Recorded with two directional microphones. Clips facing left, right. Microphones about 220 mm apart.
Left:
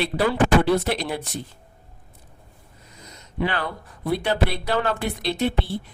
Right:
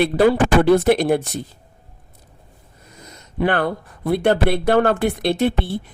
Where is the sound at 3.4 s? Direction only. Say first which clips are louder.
Right 7 dB; 50° right (ahead or behind).